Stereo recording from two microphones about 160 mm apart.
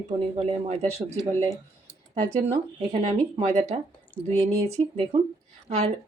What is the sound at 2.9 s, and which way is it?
Speech, 40° right (ahead or behind).